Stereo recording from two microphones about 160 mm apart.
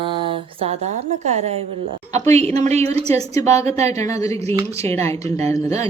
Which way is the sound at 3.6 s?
45° right (ahead or behind).